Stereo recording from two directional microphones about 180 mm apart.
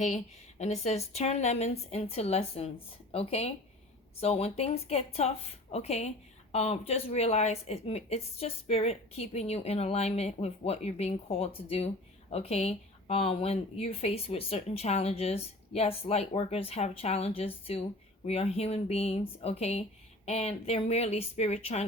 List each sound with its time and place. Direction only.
0.6 s speech: 40° left (ahead or behind)